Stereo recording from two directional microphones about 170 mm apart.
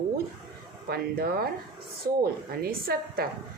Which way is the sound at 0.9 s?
65° right (ahead or behind).